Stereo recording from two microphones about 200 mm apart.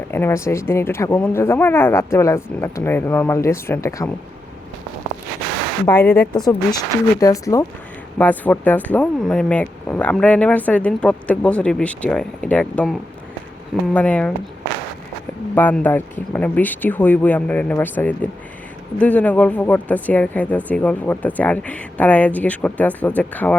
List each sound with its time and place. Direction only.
0.1 s speech: 10° left (ahead or behind)
6.1 s speech: 20° left (ahead or behind)
15.5 s speech: 10° left (ahead or behind)